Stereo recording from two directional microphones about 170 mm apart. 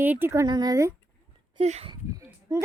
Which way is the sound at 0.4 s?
25° right (ahead or behind).